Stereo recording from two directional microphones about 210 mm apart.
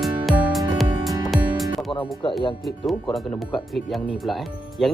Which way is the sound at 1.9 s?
25° left (ahead or behind).